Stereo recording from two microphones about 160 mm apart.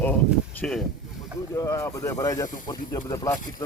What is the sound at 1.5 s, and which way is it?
Speech, 20° left (ahead or behind).